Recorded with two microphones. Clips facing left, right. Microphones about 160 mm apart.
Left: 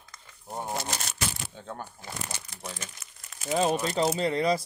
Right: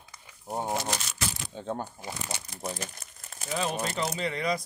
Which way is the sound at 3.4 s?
40° left (ahead or behind).